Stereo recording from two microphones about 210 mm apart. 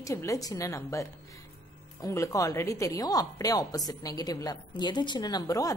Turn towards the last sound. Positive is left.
turn(degrees=15)  # may be behind; listen again after turning